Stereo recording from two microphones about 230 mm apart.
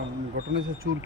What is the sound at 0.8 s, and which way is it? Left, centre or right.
Speech, right.